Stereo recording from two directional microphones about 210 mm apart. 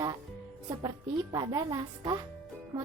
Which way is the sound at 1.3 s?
20° right (ahead or behind).